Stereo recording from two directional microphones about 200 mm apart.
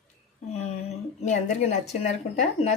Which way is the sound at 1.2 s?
35° left (ahead or behind).